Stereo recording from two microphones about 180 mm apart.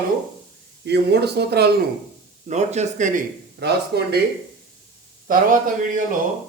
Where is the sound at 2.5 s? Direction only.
40° right (ahead or behind).